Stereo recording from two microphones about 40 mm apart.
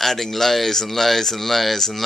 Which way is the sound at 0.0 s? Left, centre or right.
Centre.